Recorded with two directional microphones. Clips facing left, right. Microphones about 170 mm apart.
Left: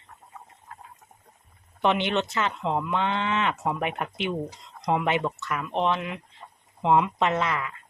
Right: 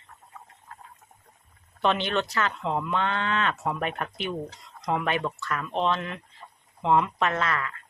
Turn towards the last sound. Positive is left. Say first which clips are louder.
# left 2 dB
turn(degrees=15)  # may be behind; listen again after turning